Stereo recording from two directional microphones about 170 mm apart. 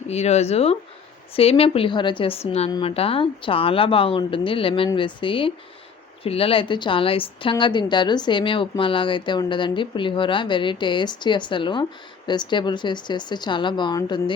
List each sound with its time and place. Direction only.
0.1 s a woman's voice: 40° left (ahead or behind)